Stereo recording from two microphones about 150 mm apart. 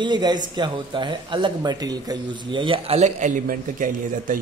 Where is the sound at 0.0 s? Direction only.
30° right (ahead or behind).